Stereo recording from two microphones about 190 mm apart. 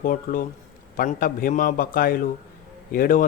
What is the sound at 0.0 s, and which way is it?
Speech, 45° left (ahead or behind).